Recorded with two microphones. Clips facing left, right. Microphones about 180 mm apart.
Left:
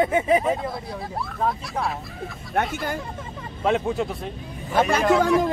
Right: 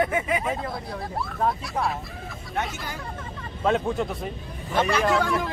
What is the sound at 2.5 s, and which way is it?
Speech, 55° left (ahead or behind).